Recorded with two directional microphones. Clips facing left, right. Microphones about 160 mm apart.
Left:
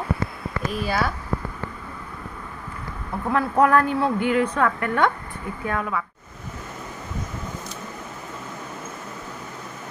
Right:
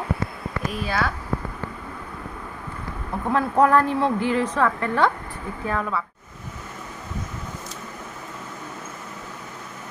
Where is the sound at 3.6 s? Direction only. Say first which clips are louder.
Even; 30° right (ahead or behind).